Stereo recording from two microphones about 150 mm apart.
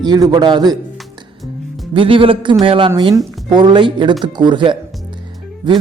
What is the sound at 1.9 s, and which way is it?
A man's voice, 35° right (ahead or behind).